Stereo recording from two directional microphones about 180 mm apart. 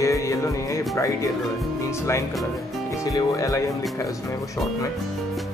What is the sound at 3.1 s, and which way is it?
Speech, 20° left (ahead or behind).